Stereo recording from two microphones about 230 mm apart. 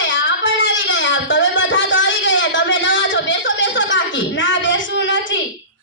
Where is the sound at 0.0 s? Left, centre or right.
Left.